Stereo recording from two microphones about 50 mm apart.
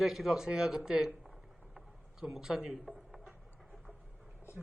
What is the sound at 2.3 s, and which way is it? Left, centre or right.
Speech, centre.